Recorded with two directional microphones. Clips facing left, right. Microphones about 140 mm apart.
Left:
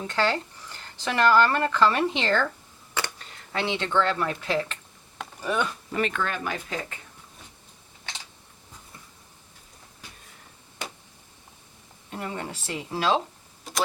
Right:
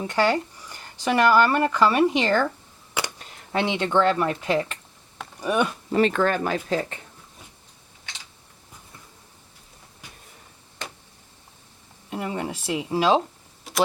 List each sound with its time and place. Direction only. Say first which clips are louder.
0.0 s speech: right 4 dB; 15° right (ahead or behind)
2.9 s a sound: right 2 dB; 15° right (ahead or behind)
5.4 s speech: right 4 dB; 15° right (ahead or behind)
5.9 s speech: right 10 dB; 35° right (ahead or behind)
10.8 s a sound: even; 10° left (ahead or behind)
12.1 s speech: right 5 dB; 10° right (ahead or behind)